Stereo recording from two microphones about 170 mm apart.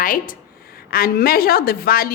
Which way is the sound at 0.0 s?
55° left (ahead or behind).